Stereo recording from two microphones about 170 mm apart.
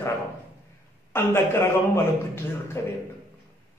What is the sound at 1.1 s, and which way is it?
A man's voice, 15° left (ahead or behind).